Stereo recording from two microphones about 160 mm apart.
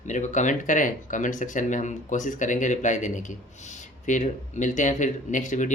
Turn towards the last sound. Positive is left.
turn(degrees=50)  # may be behind; listen again after turning